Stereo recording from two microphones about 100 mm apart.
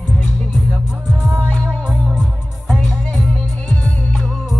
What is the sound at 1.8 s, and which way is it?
Music, 10° right (ahead or behind).